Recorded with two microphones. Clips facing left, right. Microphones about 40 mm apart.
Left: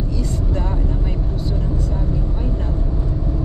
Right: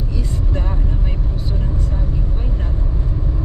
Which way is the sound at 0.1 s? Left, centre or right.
Centre.